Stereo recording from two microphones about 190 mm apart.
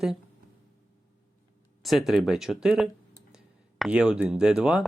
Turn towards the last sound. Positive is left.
turn(degrees=-5)  # may be behind; listen again after turning